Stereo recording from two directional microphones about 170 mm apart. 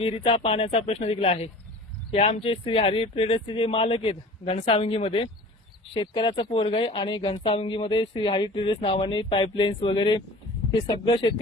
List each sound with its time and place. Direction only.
0.0 s speech: 35° left (ahead or behind)